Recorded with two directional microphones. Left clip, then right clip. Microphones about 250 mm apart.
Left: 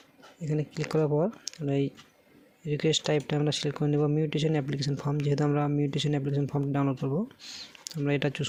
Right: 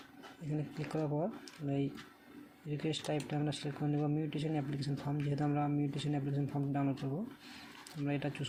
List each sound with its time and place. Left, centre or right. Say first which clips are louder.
0.5 s speech: left 10 dB; left